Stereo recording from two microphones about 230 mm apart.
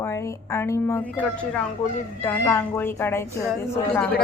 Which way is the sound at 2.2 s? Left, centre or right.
Centre.